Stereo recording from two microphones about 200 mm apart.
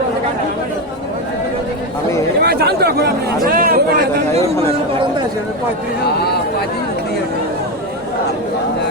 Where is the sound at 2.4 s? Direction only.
50° right (ahead or behind).